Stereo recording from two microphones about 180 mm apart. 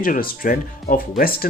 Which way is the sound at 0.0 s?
50° left (ahead or behind).